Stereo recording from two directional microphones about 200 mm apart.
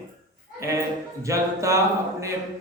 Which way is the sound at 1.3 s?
15° right (ahead or behind).